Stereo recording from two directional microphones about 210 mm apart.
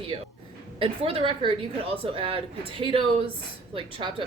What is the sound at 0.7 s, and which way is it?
A woman's voice, 25° right (ahead or behind).